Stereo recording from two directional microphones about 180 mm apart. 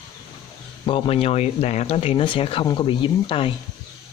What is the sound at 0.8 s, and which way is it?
Speech, 30° left (ahead or behind).